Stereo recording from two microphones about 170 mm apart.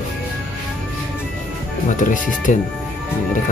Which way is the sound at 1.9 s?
50° left (ahead or behind).